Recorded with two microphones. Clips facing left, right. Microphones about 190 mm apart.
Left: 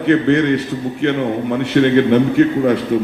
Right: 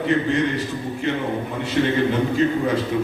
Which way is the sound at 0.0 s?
65° left (ahead or behind).